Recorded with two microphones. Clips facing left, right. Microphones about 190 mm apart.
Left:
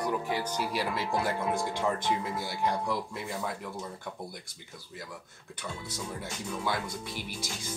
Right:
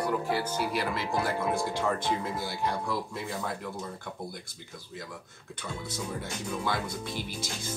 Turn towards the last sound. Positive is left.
turn(degrees=15)  # may be behind; listen again after turning